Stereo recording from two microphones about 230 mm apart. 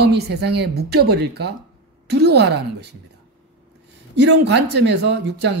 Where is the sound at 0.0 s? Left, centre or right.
Right.